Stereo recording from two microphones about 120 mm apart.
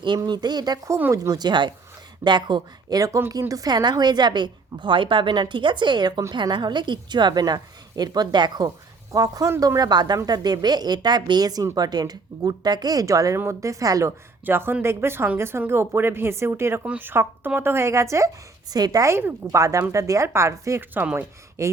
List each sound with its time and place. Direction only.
0.3 s a woman's voice: 35° right (ahead or behind)
14.4 s speech: 20° right (ahead or behind)
21.6 s speech: 25° right (ahead or behind)